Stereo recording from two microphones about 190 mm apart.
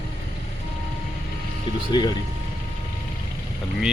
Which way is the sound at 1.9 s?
25° left (ahead or behind).